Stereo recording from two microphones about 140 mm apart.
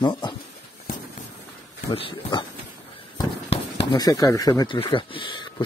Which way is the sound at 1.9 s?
40° left (ahead or behind).